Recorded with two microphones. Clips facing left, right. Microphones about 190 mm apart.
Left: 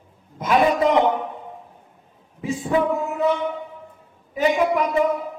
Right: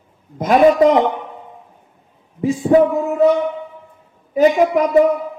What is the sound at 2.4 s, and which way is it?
Speech, 40° right (ahead or behind).